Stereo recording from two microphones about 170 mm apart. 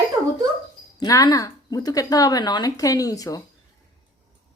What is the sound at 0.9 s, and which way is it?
Speech, 20° left (ahead or behind).